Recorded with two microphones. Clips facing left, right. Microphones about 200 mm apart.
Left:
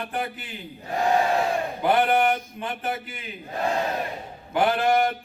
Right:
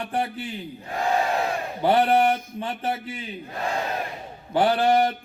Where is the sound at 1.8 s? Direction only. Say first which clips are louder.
Right 2 dB; 30° right (ahead or behind).